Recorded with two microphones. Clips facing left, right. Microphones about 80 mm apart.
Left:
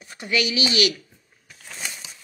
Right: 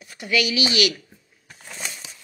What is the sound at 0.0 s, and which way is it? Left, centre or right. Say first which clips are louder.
Speech: right 1 dB; left.